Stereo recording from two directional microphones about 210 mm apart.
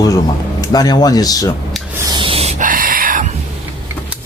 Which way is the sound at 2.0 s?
20° right (ahead or behind).